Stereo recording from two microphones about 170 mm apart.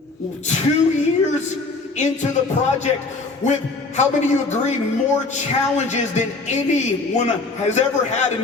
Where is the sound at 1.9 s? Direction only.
45° left (ahead or behind).